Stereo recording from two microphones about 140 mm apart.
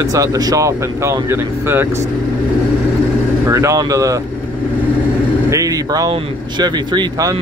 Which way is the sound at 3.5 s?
20° right (ahead or behind).